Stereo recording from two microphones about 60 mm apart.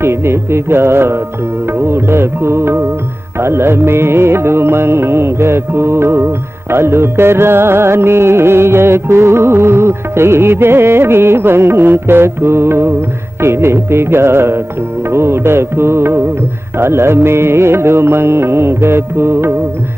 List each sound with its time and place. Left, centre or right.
0.0 s music: right